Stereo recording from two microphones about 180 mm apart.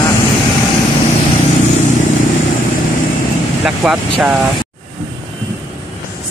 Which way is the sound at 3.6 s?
5° right (ahead or behind).